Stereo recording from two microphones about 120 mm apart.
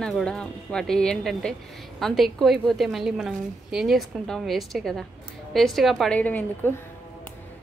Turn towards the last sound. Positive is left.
turn(degrees=15)  # may be behind; listen again after turning